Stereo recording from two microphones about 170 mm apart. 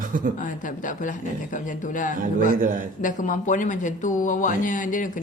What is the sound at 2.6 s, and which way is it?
Speech, 50° right (ahead or behind).